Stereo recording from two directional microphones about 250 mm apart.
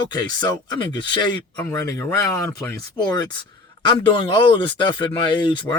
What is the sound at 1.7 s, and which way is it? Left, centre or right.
Speech, centre.